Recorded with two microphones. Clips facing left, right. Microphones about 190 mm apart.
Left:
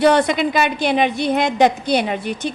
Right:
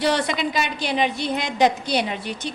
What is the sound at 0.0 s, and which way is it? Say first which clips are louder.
A woman's voice: left 7 dB; 55° left (ahead or behind).